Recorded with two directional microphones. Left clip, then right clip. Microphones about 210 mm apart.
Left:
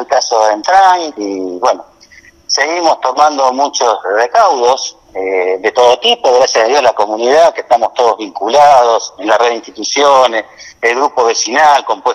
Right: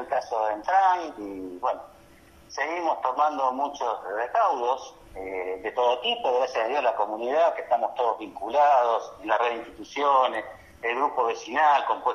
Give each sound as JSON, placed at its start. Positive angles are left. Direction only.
{"t": 0.1, "sound": "speech", "side_deg": 45}